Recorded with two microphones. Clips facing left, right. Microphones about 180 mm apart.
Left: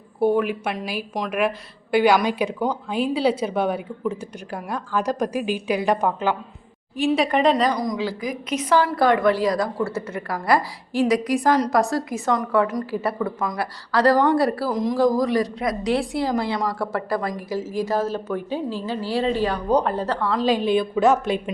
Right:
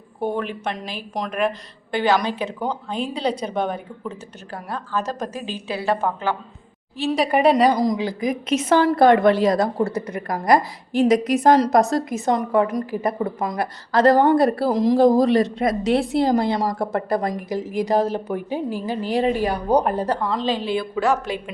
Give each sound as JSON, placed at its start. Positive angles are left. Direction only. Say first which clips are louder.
{"t": 0.2, "sound": "a woman's voice", "louder": "left 5 dB", "side_deg": 10}
{"t": 7.2, "sound": "a woman's voice", "louder": "right 5 dB", "side_deg": -10}
{"t": 7.7, "sound": "a woman's voice", "louder": "right 4 dB", "side_deg": -25}
{"t": 10.2, "sound": "a woman's voice", "louder": "right 2 dB", "side_deg": -45}
{"t": 10.4, "sound": "a woman's voice", "louder": "right 3 dB", "side_deg": -20}
{"t": 13.1, "sound": "a woman's voice", "louder": "right 1 dB", "side_deg": -25}
{"t": 16.2, "sound": "a woman's voice", "louder": "right 4 dB", "side_deg": -50}
{"t": 16.7, "sound": "a woman's voice", "louder": "right 2 dB", "side_deg": -20}
{"t": 20.4, "sound": "a woman's voice", "louder": "left 3 dB", "side_deg": 15}